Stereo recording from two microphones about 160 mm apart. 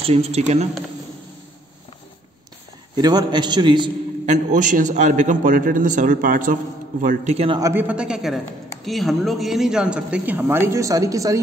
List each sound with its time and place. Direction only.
0.0 s speech: 40° right (ahead or behind)
3.0 s a man's voice: 25° right (ahead or behind)
4.3 s a man's voice: 50° right (ahead or behind)
7.3 s speech: 35° right (ahead or behind)
7.6 s speech: 10° right (ahead or behind)